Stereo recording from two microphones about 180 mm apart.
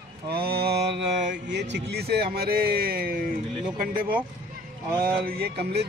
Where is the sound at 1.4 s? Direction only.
75° right (ahead or behind); by 3.2 s 55° right (ahead or behind).